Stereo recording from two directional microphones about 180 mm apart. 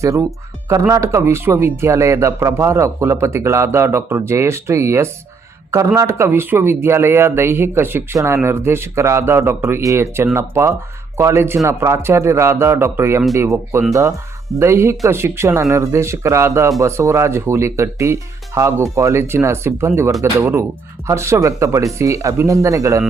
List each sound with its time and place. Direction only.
0.0 s speech: 15° right (ahead or behind)